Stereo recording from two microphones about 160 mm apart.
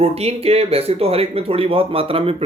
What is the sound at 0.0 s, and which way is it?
Speech, 40° right (ahead or behind).